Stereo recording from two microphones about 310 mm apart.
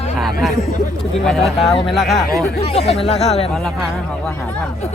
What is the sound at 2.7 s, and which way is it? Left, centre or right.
Speech, centre.